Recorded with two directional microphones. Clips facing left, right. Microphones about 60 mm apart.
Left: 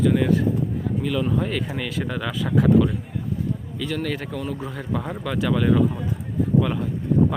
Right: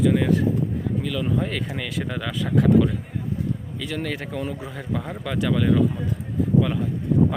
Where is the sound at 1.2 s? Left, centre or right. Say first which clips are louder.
Left 1 dB; centre.